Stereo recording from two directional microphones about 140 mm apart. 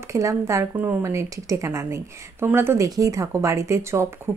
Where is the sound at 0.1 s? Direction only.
20° right (ahead or behind).